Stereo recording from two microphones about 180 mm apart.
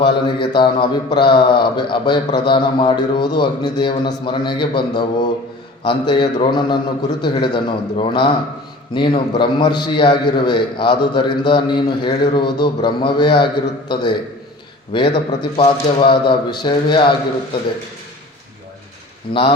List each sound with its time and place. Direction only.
0.0 s speech: 25° left (ahead or behind)
19.3 s speech: 30° left (ahead or behind)